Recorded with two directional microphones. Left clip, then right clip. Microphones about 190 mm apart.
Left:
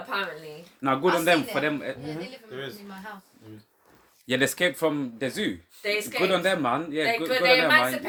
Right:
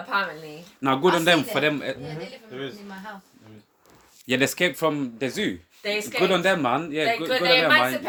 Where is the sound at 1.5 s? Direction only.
40° right (ahead or behind).